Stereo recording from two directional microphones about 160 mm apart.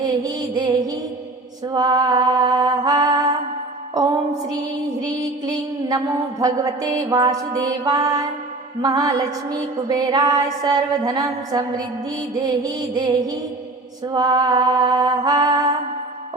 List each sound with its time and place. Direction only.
0.0 s music: 25° right (ahead or behind)
1.6 s a sound: 25° right (ahead or behind)
3.9 s music: 25° right (ahead or behind)
4.9 s mantra: 25° right (ahead or behind)
6.4 s music: 25° right (ahead or behind)